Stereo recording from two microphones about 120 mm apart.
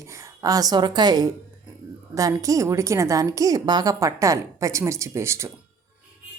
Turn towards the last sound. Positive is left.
turn(degrees=-25)  # may be behind; listen again after turning